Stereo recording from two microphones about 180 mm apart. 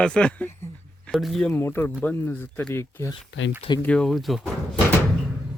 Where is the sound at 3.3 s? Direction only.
90° left.